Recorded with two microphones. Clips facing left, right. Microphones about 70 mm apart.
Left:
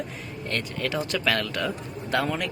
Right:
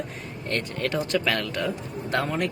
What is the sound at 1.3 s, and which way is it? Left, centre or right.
Speech, right.